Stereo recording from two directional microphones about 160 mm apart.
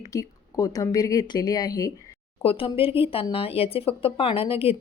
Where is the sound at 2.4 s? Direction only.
35° left (ahead or behind).